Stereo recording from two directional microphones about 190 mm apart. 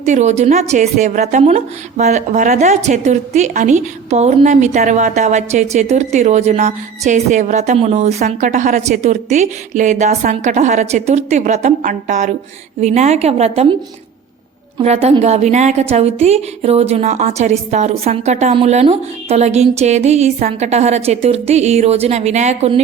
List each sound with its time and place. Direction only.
0.0 s a woman's voice: 40° right (ahead or behind)
14.8 s a woman's voice: 30° right (ahead or behind)